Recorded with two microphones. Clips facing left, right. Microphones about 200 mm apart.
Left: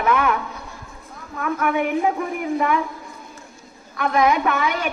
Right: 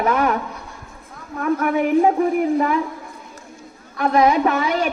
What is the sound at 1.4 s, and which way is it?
Speech, 40° right (ahead or behind).